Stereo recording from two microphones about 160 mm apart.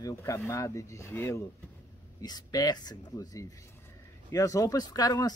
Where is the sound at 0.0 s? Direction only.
15° left (ahead or behind).